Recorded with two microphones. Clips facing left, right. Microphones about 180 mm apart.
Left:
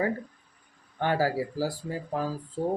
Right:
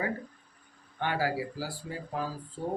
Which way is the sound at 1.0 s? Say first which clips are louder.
Left 4 dB; 40° left (ahead or behind).